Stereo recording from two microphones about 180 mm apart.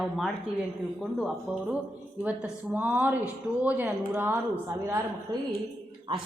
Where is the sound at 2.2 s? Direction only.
10° right (ahead or behind).